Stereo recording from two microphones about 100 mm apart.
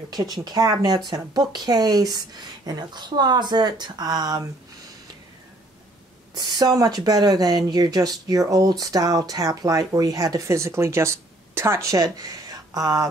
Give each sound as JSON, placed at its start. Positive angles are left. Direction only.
{"t": 0.1, "sound": "speech", "side_deg": -40}
{"t": 6.3, "sound": "speech", "side_deg": -45}